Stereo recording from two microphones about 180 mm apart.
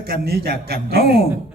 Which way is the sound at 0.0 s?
60° right (ahead or behind).